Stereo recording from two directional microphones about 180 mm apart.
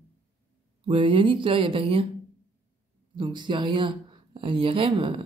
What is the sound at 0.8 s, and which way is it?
Speech, 30° right (ahead or behind).